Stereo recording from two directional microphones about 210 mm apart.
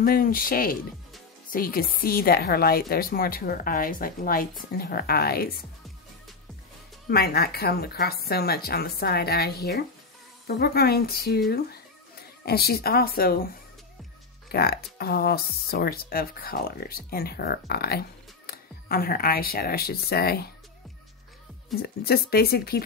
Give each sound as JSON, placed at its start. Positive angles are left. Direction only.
{"t": 0.0, "sound": "a woman's voice", "side_deg": 45}
{"t": 7.1, "sound": "a woman's voice", "side_deg": 45}
{"t": 14.5, "sound": "a woman's voice", "side_deg": 50}
{"t": 21.7, "sound": "a woman's voice", "side_deg": 50}